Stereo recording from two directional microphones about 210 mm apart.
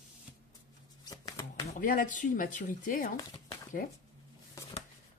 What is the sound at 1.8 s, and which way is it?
Speech, 40° left (ahead or behind).